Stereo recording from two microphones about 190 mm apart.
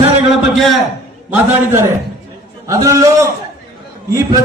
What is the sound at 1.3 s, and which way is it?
A man's voice, 10° right (ahead or behind).